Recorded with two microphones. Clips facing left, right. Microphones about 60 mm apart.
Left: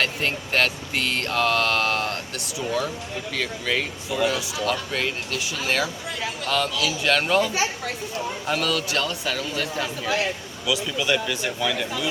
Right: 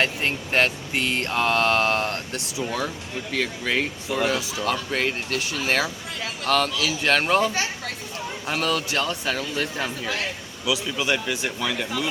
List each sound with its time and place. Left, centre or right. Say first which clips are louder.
0.0 s speech: right 1 dB; right
3.3 s speech: right 1 dB; right; by 11.9 s centre